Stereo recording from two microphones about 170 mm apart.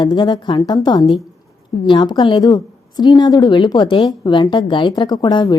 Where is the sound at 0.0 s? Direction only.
25° left (ahead or behind).